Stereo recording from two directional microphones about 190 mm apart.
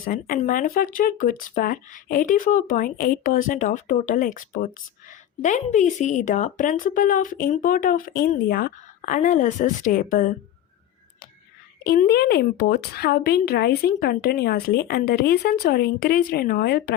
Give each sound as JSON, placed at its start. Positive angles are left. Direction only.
{"t": 0.0, "sound": "speech", "side_deg": 45}
{"t": 11.8, "sound": "speech", "side_deg": 55}